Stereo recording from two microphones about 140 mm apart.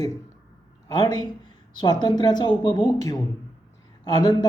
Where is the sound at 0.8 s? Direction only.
30° left (ahead or behind).